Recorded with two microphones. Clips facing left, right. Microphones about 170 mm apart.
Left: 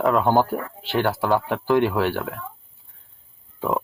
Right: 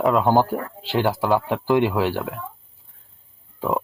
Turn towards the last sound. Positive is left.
turn(degrees=0)  # may be behind; listen again after turning